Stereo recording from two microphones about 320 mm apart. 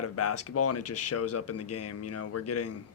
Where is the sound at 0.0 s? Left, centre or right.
Left.